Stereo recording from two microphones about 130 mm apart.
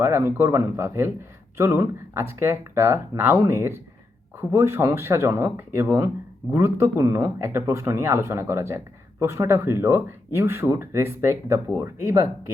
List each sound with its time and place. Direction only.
0.0 s speech: 20° right (ahead or behind)